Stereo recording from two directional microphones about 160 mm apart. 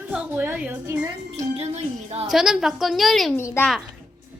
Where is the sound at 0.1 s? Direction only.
10° right (ahead or behind).